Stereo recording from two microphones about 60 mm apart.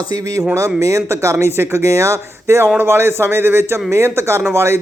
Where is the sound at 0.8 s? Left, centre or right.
Right.